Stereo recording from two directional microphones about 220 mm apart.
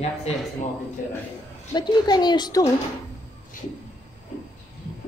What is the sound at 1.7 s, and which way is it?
Speech, 20° left (ahead or behind).